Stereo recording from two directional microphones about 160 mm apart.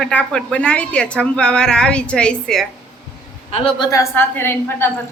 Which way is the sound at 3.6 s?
25° left (ahead or behind).